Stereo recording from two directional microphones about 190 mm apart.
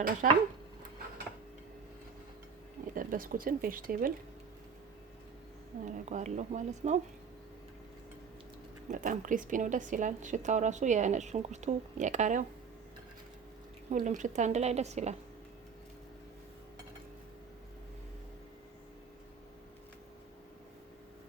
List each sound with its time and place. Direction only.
0.2 s speech: 45° right (ahead or behind)
2.9 s speech: 45° right (ahead or behind)
5.8 s a woman's voice: 40° right (ahead or behind)
8.9 s a woman's voice: 45° right (ahead or behind)
13.9 s a woman's voice: 40° right (ahead or behind)